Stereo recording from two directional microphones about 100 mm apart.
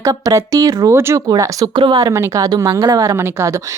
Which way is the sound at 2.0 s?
30° right (ahead or behind).